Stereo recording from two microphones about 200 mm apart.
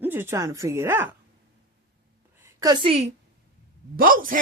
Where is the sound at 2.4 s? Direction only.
20° right (ahead or behind).